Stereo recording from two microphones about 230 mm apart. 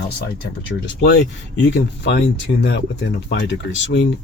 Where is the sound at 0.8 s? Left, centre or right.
Left.